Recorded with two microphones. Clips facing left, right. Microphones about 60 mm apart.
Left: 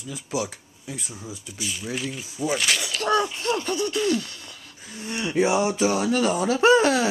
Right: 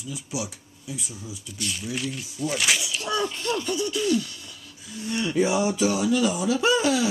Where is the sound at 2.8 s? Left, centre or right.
Left.